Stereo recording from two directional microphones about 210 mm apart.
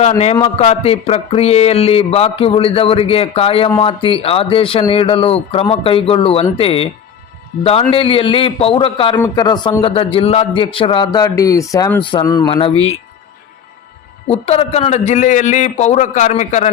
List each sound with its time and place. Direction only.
0.3 s speech: 25° left (ahead or behind)
14.3 s a man's voice: 30° left (ahead or behind)